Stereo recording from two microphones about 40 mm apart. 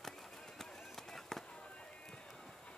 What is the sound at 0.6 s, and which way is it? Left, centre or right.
Run, centre.